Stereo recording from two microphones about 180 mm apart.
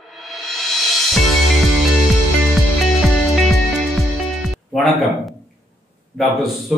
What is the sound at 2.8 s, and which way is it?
Music, centre (ahead or behind).